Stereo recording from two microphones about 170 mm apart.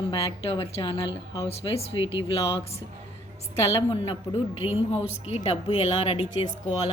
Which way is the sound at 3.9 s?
35° left (ahead or behind).